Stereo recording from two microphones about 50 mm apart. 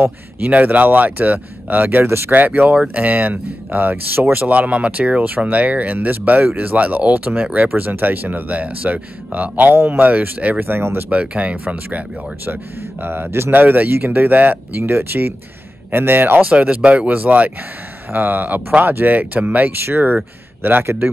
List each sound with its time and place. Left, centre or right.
0.5 s speech: right
2.3 s speech: right
8.5 s speech: right
10.6 s speech: right
11.1 s speech: right
13.0 s speech: right
13.5 s speech: right
14.8 s speech: right
16.4 s speech: right
19.7 s speech: right
20.8 s speech: right